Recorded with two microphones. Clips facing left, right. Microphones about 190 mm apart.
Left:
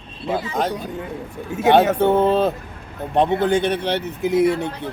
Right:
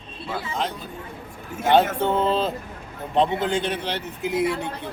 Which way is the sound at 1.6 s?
65° left (ahead or behind).